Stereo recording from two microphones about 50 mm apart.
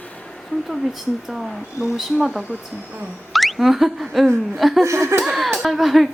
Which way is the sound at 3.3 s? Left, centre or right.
Centre.